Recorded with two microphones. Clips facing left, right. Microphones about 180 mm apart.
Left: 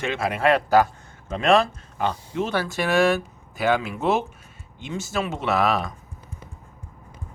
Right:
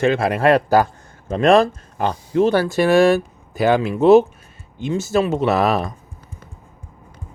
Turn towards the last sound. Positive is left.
turn(degrees=-40)  # may be behind; listen again after turning